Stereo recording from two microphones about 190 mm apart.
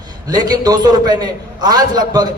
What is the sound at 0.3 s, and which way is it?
A man's voice, 20° right (ahead or behind).